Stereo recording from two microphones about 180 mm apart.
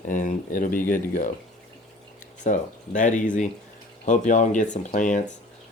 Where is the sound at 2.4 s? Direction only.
45° left (ahead or behind).